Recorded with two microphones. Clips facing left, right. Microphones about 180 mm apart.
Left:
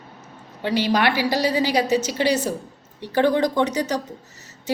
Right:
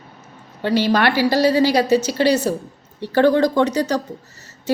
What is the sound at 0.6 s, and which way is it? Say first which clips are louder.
A woman's voice: right 3 dB; 15° left (ahead or behind).